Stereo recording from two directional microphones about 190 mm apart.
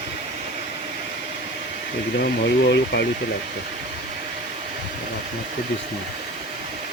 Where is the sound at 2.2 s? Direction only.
60° left (ahead or behind).